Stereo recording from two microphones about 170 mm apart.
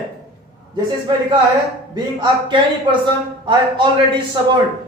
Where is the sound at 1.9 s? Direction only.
25° right (ahead or behind).